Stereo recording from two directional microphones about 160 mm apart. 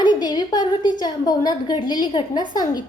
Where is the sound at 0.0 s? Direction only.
25° left (ahead or behind).